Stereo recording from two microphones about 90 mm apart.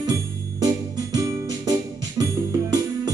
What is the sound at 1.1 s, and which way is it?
Keyboard, 45° right (ahead or behind).